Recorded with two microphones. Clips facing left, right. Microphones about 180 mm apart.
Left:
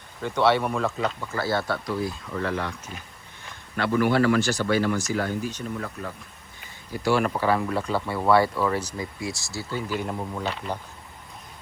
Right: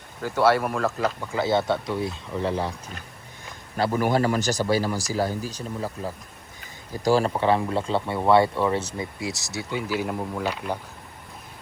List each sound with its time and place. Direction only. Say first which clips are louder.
0.2 s speech: right 1 dB; 5° right (ahead or behind)
1.2 s speech: right 3 dB; 15° right (ahead or behind); by 7.3 s 35° right (ahead or behind)
7.3 s speech: right 2 dB; 25° right (ahead or behind)
9.6 s speech: right 2 dB; 10° right (ahead or behind)